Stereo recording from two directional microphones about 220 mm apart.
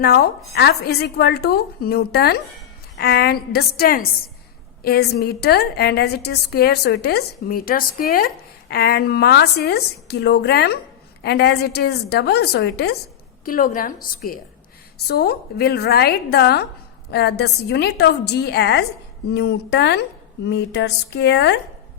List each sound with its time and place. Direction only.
0.0 s a woman's voice: 45° left (ahead or behind)